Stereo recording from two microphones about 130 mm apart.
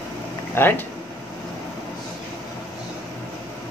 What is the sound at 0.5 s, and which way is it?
Speech, 15° left (ahead or behind).